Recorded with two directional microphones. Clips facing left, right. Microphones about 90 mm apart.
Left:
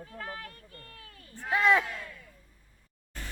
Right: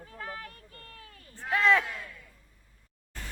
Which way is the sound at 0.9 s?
35° right (ahead or behind).